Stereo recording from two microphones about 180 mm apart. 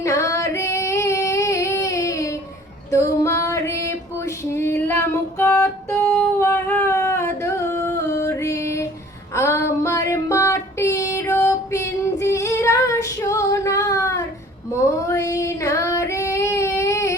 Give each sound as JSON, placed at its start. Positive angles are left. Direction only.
{"t": 0.0, "sound": "female singing", "side_deg": 15}
{"t": 9.3, "sound": "child singing", "side_deg": 15}